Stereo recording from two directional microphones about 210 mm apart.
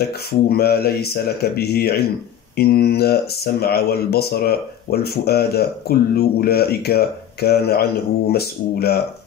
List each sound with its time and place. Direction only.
0.3 s speech: 50° left (ahead or behind)